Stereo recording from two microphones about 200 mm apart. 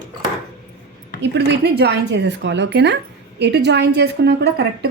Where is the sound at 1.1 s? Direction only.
60° right (ahead or behind).